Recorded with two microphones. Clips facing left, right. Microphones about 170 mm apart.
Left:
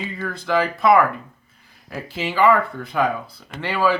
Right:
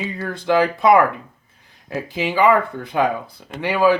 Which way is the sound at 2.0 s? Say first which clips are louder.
Right 1 dB; 15° right (ahead or behind).